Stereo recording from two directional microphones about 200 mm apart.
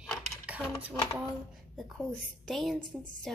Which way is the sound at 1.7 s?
Centre (ahead or behind).